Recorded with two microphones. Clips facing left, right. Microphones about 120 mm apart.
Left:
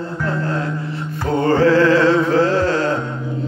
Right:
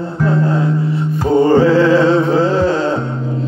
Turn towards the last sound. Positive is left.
turn(degrees=-20)  # may be behind; listen again after turning